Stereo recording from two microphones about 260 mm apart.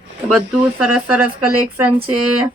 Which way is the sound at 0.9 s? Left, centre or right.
Centre.